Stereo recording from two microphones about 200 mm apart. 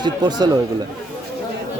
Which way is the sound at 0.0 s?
20° right (ahead or behind).